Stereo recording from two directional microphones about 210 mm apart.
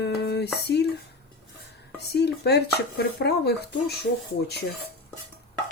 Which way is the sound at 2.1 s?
50° left (ahead or behind).